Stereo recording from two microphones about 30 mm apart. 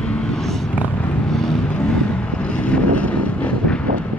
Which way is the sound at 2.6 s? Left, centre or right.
Left.